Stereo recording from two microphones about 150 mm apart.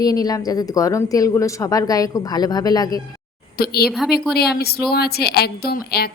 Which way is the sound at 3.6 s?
90° left.